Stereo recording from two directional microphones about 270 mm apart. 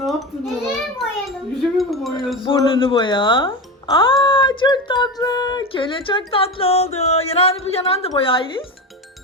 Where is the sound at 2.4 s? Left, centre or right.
Centre.